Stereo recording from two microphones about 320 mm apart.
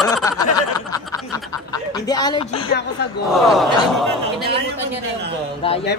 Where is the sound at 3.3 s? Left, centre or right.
Centre.